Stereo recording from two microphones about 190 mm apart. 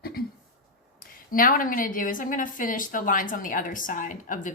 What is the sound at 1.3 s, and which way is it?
A woman's voice, 45° left (ahead or behind).